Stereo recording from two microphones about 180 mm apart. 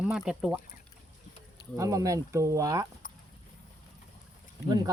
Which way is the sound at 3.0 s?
50° left (ahead or behind).